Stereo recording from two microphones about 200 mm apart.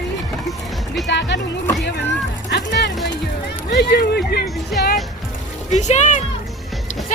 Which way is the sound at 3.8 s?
55° left (ahead or behind).